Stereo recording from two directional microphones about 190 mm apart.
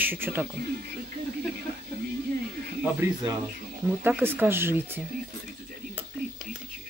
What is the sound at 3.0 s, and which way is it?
Speech, 20° right (ahead or behind).